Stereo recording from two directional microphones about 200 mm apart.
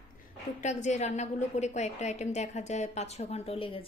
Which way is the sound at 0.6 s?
35° left (ahead or behind).